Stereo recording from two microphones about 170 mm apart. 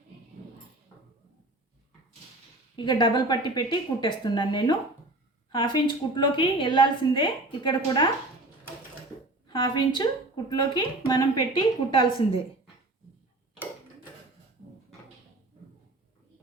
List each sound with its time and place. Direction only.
2.7 s a woman's voice: 25° left (ahead or behind)
9.5 s a woman's voice: 25° left (ahead or behind)